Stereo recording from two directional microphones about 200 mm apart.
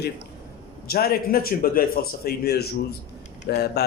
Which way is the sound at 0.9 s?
50° left (ahead or behind).